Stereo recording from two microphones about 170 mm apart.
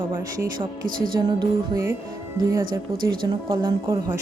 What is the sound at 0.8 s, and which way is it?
Music, 55° right (ahead or behind).